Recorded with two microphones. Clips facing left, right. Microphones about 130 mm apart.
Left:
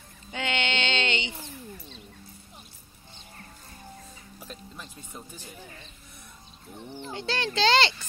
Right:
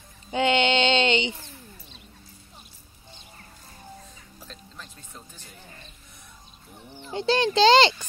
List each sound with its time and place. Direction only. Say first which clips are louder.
0.3 s a sound: right 9 dB; 20° right (ahead or behind)
4.4 s music: left 2 dB; 10° left (ahead or behind)
7.1 s a child's voice: right 9 dB; 20° right (ahead or behind)